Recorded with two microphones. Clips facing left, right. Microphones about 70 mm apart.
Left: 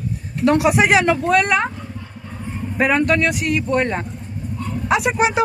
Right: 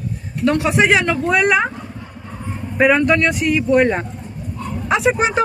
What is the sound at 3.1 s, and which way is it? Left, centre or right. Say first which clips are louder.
Speech: right 2 dB; centre.